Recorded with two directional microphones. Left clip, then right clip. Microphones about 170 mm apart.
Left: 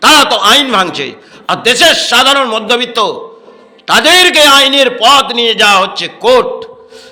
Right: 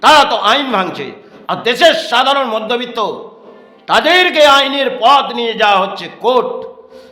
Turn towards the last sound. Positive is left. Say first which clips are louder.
# left 5 dB
turn(degrees=15)  # may be behind; listen again after turning